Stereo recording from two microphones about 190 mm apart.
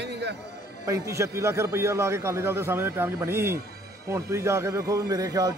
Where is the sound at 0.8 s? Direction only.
15° right (ahead or behind).